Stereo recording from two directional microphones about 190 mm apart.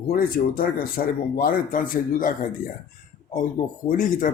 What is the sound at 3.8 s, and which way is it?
Speech, 45° left (ahead or behind).